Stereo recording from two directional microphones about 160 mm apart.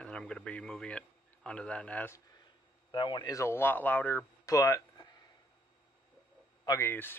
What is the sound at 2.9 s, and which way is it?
Speech, 30° left (ahead or behind).